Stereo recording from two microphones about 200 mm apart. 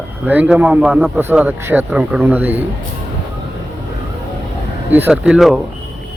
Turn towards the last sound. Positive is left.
turn(degrees=-5)  # may be behind; listen again after turning